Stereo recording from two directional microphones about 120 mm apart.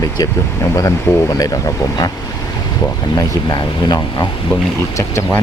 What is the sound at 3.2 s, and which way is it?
Speech, 35° left (ahead or behind).